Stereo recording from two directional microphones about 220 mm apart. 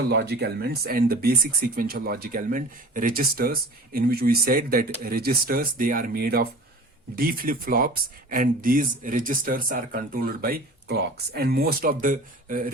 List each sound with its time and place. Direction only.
0.1 s speech: 50° right (ahead or behind)